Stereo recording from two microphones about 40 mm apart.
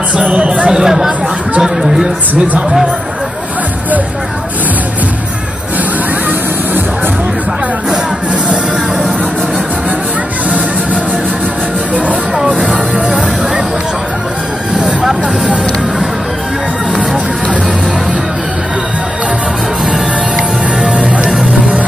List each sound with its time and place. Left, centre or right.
0.1 s speech: right
0.7 s speech: centre
2.3 s speech: right
12.4 s music: centre
12.6 s music: right
20.8 s music: right